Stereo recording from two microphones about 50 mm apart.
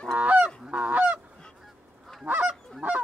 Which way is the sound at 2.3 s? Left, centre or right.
Right.